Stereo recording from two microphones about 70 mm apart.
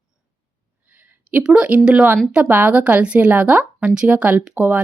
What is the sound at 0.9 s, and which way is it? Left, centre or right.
A woman's voice, centre.